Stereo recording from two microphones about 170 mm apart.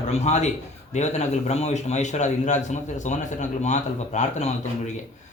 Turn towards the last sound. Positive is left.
turn(degrees=45)  # may be behind; listen again after turning